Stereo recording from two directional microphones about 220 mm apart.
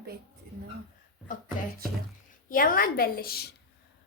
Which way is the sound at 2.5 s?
40° left (ahead or behind).